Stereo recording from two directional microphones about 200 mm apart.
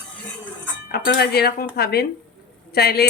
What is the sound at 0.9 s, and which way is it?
Speech, 50° left (ahead or behind).